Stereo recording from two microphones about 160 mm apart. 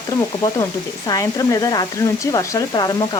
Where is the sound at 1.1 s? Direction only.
20° left (ahead or behind).